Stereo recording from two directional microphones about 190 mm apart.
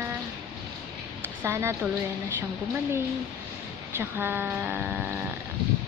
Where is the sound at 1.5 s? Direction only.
15° right (ahead or behind).